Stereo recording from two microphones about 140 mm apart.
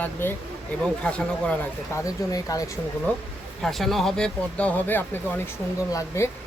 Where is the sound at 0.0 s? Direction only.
15° left (ahead or behind).